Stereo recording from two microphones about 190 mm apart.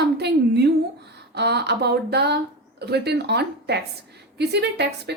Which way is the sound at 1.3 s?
60° right (ahead or behind).